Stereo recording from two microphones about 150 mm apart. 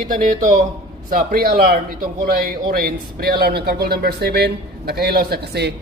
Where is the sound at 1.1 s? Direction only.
75° right (ahead or behind).